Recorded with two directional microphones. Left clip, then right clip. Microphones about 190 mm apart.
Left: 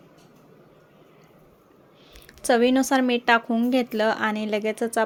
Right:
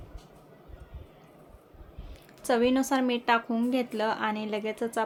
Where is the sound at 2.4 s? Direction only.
30° left (ahead or behind).